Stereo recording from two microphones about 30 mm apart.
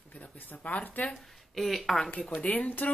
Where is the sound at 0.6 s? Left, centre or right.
Left.